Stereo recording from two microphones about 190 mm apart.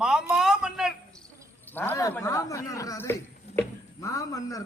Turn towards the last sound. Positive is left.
turn(degrees=15)  # may be behind; listen again after turning